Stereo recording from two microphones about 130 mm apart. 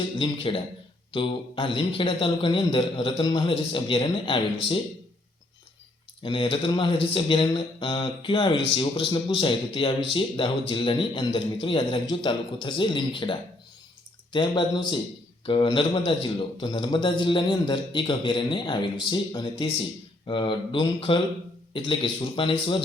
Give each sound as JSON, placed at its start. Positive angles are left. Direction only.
{"t": 0.2, "sound": "a man's voice", "side_deg": 40}
{"t": 6.2, "sound": "speech", "side_deg": 40}
{"t": 14.3, "sound": "speech", "side_deg": 35}